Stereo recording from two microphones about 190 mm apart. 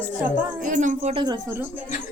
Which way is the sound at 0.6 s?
40° right (ahead or behind).